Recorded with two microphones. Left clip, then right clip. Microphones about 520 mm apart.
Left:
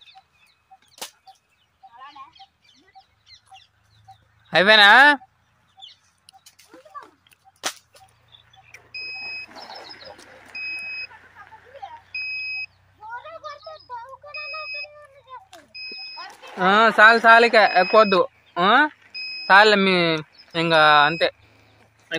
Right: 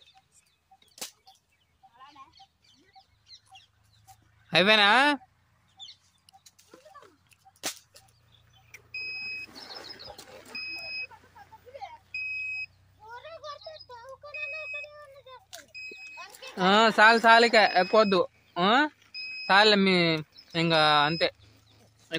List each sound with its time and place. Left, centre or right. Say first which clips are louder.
2.0 s a sound: left 9 dB; right
3.0 s goose: left 3 dB; right
4.5 s speech: left 8 dB; right
5.9 s chicken: left 3 dB; right
7.6 s whip: left 7 dB; right
13.1 s a sound: left 6 dB; right
16.5 s speech: left 6 dB; right